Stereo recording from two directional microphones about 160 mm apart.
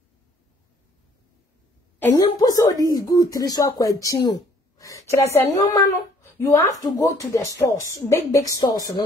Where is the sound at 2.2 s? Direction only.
20° left (ahead or behind).